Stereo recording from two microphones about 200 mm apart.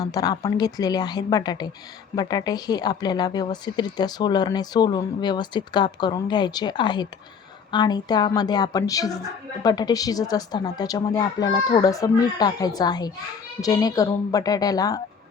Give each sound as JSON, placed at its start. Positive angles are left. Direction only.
{"t": 0.0, "sound": "a woman's voice", "side_deg": 20}